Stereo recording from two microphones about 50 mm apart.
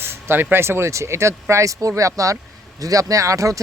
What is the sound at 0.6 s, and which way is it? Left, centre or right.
Speech, right.